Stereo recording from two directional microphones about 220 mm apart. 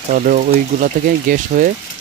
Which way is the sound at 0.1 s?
35° right (ahead or behind).